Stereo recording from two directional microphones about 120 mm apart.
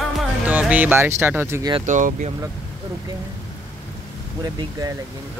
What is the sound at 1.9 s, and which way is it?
Speech, 90° right.